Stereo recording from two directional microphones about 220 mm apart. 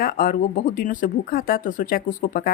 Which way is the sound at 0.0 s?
40° left (ahead or behind).